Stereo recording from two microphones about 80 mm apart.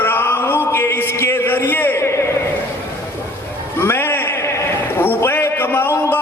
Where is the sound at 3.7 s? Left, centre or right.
Left.